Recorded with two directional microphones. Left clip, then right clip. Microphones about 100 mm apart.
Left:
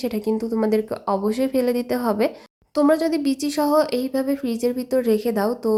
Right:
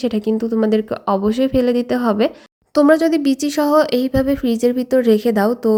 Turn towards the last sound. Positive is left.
turn(degrees=-35)  # may be behind; listen again after turning